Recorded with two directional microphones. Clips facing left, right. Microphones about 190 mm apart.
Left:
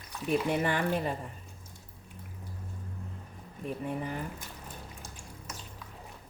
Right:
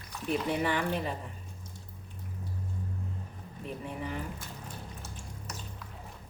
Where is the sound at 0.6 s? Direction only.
50° left (ahead or behind).